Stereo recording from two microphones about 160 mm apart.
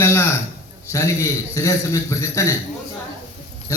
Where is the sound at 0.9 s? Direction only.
20° left (ahead or behind).